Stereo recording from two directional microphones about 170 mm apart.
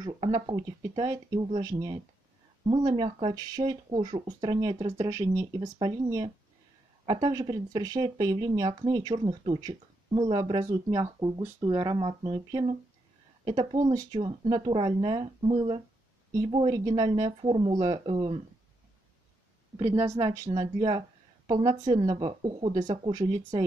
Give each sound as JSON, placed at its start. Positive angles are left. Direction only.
{"t": 0.0, "sound": "speech", "side_deg": -25}
{"t": 19.8, "sound": "a woman's voice", "side_deg": -15}